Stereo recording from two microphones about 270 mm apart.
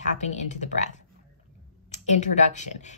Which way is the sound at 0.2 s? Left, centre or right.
Left.